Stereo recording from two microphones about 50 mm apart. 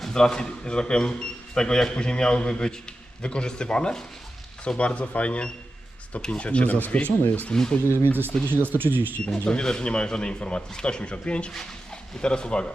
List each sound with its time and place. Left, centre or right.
0.0 s a man's voice: centre
7.5 s speech: centre
8.0 s speech: right
9.5 s a man's voice: centre